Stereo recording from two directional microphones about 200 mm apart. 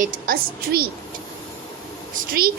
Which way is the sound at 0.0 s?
45° right (ahead or behind).